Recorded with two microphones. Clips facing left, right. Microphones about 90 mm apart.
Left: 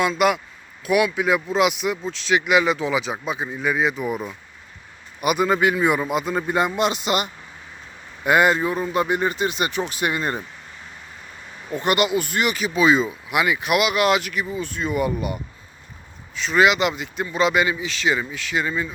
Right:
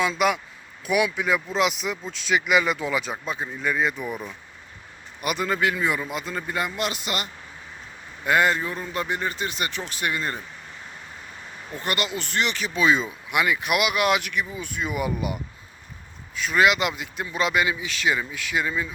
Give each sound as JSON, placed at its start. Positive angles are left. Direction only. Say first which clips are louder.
{"t": 0.0, "sound": "a man's voice", "louder": "left 3 dB", "side_deg": 5}
{"t": 11.7, "sound": "speech", "louder": "left 8 dB", "side_deg": 20}